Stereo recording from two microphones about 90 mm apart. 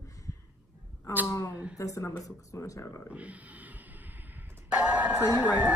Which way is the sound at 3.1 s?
15° right (ahead or behind).